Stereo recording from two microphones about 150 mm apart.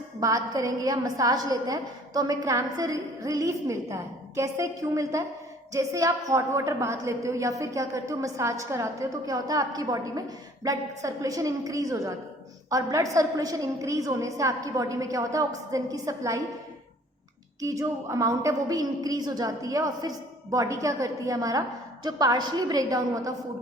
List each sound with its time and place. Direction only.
0.2 s a woman's voice: 25° right (ahead or behind)
17.6 s a woman's voice: 20° right (ahead or behind)